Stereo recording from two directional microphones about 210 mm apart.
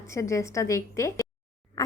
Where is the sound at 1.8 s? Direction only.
15° left (ahead or behind).